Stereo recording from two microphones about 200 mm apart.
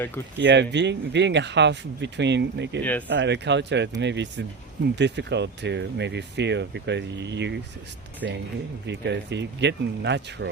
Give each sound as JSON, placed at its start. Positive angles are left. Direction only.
{"t": 0.3, "sound": "speech", "side_deg": -60}